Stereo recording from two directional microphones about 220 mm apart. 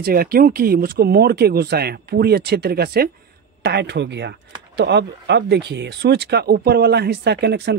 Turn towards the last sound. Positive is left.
turn(degrees=-50)  # may be behind; listen again after turning